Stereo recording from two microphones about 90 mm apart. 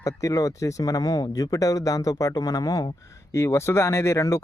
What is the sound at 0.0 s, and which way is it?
Speech, 35° left (ahead or behind).